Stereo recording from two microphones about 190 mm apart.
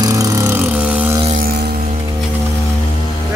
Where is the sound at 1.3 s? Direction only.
50° right (ahead or behind).